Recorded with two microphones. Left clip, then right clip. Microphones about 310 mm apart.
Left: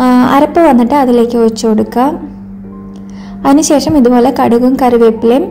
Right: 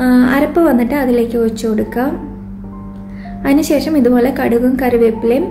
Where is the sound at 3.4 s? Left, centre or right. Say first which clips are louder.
Left 5 dB; centre.